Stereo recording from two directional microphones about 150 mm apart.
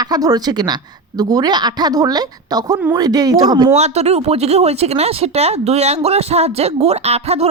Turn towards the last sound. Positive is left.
turn(degrees=-45)  # may be behind; listen again after turning